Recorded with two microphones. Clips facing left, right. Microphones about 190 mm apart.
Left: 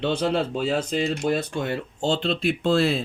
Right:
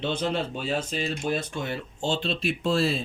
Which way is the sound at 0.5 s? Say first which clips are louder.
Left 5 dB; 90° left.